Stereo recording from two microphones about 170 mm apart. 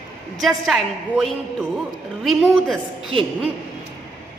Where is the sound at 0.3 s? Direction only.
Centre (ahead or behind).